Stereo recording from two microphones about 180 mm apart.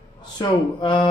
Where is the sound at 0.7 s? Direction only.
25° left (ahead or behind).